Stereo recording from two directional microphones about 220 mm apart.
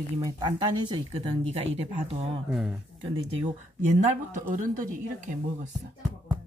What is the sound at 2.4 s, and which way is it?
Speech, centre (ahead or behind).